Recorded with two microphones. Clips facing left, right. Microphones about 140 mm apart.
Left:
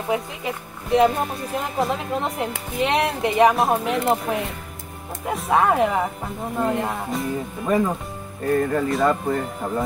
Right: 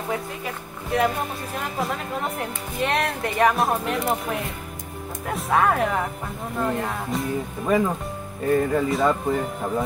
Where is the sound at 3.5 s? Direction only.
Centre (ahead or behind).